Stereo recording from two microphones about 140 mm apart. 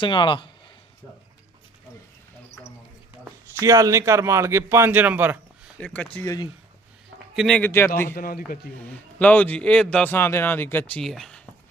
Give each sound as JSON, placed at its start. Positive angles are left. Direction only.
{"t": 0.0, "sound": "speech", "side_deg": 35}
{"t": 3.6, "sound": "a man's voice", "side_deg": -20}
{"t": 5.8, "sound": "a man's voice", "side_deg": 10}
{"t": 6.1, "sound": "speech", "side_deg": 25}
{"t": 7.3, "sound": "a man's voice", "side_deg": 5}
{"t": 8.1, "sound": "a man's voice", "side_deg": 90}
{"t": 8.8, "sound": "a man's voice", "side_deg": 10}